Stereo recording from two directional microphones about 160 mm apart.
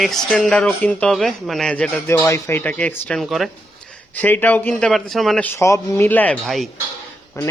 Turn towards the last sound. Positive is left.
turn(degrees=20)  # may be behind; listen again after turning